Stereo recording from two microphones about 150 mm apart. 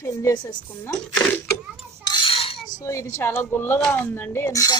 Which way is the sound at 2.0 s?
30° left (ahead or behind).